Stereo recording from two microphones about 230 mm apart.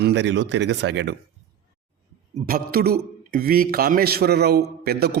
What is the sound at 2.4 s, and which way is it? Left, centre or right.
A man's voice, right.